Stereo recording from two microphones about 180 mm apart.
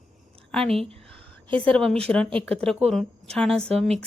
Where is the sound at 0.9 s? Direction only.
5° left (ahead or behind).